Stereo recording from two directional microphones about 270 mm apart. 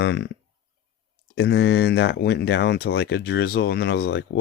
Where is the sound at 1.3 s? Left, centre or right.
Left.